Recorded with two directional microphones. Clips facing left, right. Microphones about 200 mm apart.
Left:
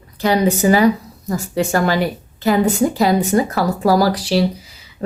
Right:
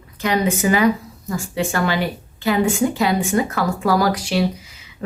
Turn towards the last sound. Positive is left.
turn(degrees=35)  # may be behind; listen again after turning